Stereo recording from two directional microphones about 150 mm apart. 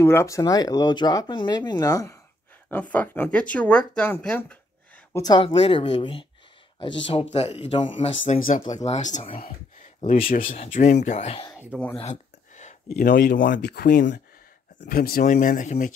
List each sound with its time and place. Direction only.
0.0 s speech: 15° left (ahead or behind)
2.7 s speech: 10° left (ahead or behind)
5.2 s speech: 35° left (ahead or behind)
8.3 s speech: 55° left (ahead or behind)
10.0 s speech: 65° left (ahead or behind)
10.6 s speech: 50° left (ahead or behind)
11.5 s speech: 10° right (ahead or behind)
12.0 s a sound: 50° left (ahead or behind)
12.9 s speech: 80° left; by 15.9 s 55° left (ahead or behind)